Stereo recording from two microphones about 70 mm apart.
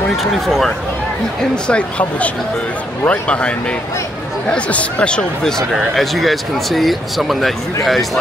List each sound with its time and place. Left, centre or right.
0.2 s speech: centre
1.5 s speech: centre